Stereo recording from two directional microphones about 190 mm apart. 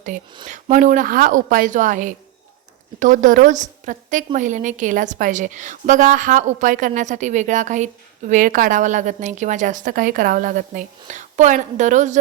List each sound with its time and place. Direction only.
0.4 s a woman's voice: 40° right (ahead or behind)